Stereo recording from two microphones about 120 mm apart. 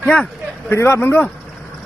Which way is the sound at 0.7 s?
20° left (ahead or behind).